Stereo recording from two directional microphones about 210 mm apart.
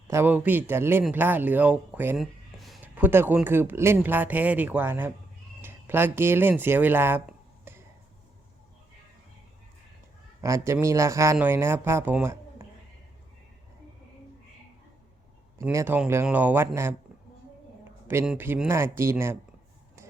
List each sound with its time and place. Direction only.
0.1 s speech: 10° right (ahead or behind)
10.4 s speech: 15° right (ahead or behind)
15.5 s speech: 15° right (ahead or behind)
18.1 s speech: 10° right (ahead or behind)